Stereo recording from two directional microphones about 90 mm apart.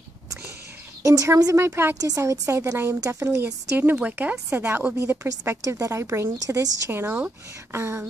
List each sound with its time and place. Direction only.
1.0 s speech: 35° right (ahead or behind)
2.0 s speech: 40° right (ahead or behind)
3.7 s speech: 20° right (ahead or behind)
6.3 s a woman's voice: 45° right (ahead or behind)
6.9 s speech: 25° right (ahead or behind)